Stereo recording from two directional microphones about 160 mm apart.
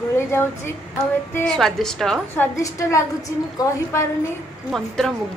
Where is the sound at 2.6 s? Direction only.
20° left (ahead or behind).